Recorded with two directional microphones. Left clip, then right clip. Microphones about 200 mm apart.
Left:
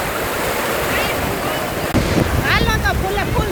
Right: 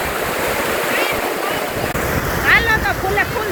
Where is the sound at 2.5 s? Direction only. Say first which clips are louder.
Right 5 dB; 20° left (ahead or behind).